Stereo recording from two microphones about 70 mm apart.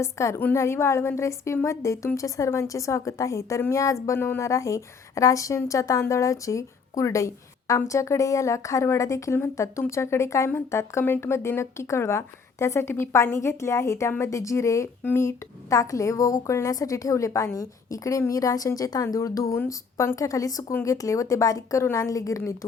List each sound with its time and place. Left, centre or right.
0.0 s a woman's voice: left
4.0 s speech: left
4.4 s a woman's voice: left